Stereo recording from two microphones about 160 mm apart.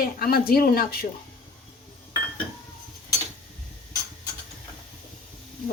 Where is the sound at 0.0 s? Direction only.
65° left (ahead or behind).